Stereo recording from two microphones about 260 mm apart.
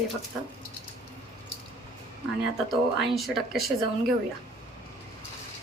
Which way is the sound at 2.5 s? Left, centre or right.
Centre.